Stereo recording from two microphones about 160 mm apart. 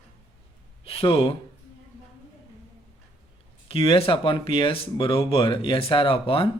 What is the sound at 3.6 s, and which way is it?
Speech, 35° left (ahead or behind).